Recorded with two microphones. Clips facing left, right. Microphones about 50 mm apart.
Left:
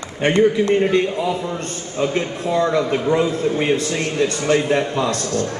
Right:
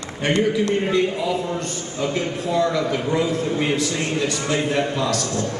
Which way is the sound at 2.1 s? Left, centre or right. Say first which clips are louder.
Even; left.